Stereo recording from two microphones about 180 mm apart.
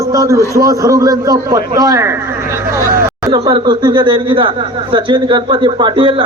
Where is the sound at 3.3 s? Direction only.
25° right (ahead or behind).